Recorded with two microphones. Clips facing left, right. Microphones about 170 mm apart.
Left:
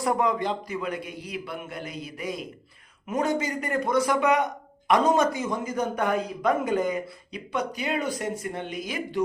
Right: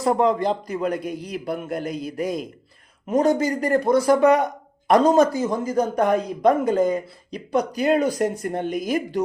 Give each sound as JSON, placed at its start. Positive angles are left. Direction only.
{"t": 0.0, "sound": "a man's voice", "side_deg": -30}